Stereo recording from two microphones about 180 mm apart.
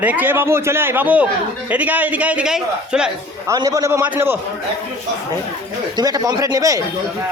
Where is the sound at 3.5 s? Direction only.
20° right (ahead or behind).